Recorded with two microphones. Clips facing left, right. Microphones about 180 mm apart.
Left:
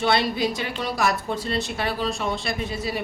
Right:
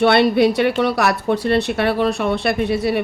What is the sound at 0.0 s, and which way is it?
Speech, 65° right (ahead or behind).